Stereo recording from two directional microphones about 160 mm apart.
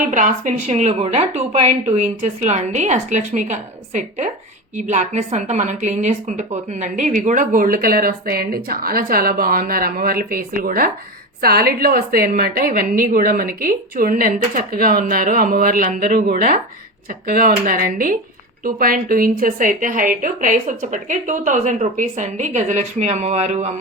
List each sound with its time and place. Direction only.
0.1 s a woman's voice: 55° right (ahead or behind)